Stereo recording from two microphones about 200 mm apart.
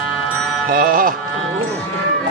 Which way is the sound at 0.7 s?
40° right (ahead or behind).